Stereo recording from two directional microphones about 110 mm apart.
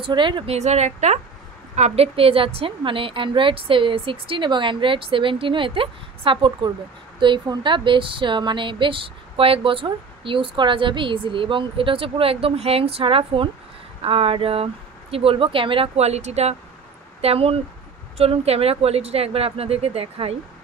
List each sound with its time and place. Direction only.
0.0 s speech: 45° right (ahead or behind)
0.5 s a woman's voice: 90° right
1.8 s speech: 70° right (ahead or behind); by 16.5 s 85° right
17.2 s speech: 65° right (ahead or behind)